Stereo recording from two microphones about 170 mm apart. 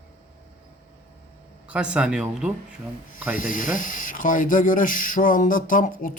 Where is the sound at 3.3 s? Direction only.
55° left (ahead or behind).